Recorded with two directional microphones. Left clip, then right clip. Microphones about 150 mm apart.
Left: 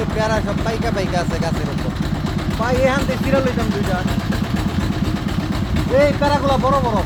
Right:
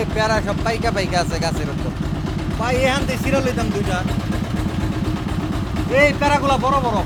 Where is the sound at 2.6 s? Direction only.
40° right (ahead or behind).